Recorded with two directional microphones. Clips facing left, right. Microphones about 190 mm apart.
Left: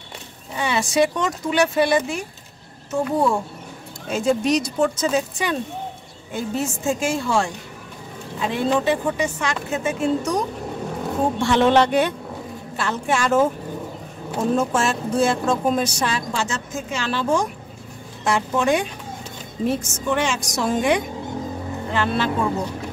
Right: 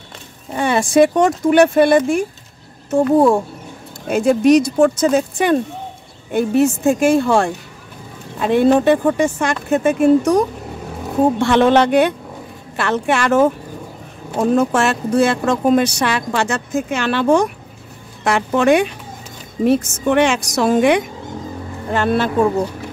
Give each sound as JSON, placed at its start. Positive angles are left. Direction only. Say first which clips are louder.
{"t": 0.5, "sound": "speech", "louder": "right 6 dB", "side_deg": -50}
{"t": 12.7, "sound": "a woman's voice", "louder": "right 5 dB", "side_deg": -65}
{"t": 21.9, "sound": "speech", "louder": "right 6 dB", "side_deg": -50}